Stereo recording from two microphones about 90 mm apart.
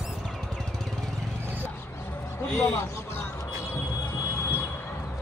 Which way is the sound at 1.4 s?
20° right (ahead or behind).